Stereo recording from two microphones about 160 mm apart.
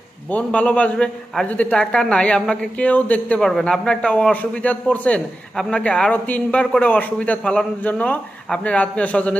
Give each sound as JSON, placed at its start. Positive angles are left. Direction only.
{"t": 0.3, "sound": "a man's voice", "side_deg": 10}